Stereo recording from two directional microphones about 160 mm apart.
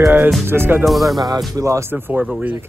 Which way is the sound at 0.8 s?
Centre (ahead or behind).